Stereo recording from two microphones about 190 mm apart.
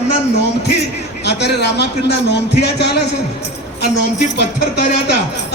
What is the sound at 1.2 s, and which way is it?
A man's voice, 60° left (ahead or behind).